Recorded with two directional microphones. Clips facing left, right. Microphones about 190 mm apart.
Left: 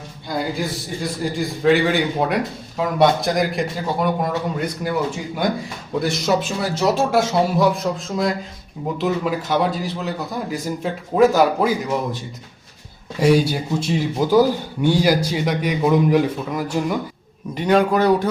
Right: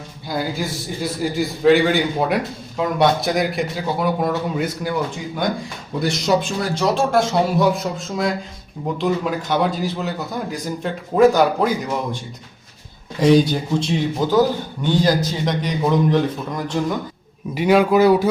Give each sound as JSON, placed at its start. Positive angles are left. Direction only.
{"t": 0.3, "sound": "a man's voice", "side_deg": 0}
{"t": 6.0, "sound": "a man's voice", "side_deg": 0}
{"t": 13.1, "sound": "a man's voice", "side_deg": 10}
{"t": 17.5, "sound": "a man's voice", "side_deg": -5}